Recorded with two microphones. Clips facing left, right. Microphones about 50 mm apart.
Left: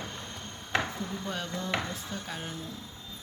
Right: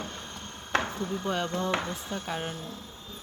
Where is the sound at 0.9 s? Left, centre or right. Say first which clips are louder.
Right 5 dB; right.